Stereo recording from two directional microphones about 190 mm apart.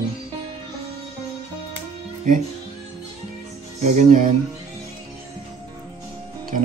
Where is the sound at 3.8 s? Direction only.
40° right (ahead or behind).